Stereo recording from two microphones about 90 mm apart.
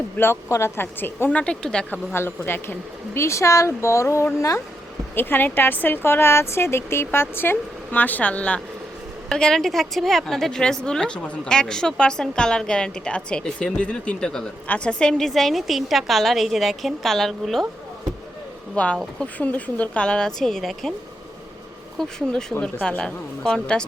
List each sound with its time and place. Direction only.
0.2 s speech: 30° left (ahead or behind); by 1.9 s 10° left (ahead or behind)
1.9 s a woman's voice: 25° left (ahead or behind); by 17.7 s centre (ahead or behind)
18.7 s a woman's voice: 15° left (ahead or behind)
21.9 s a woman's voice: 5° left (ahead or behind)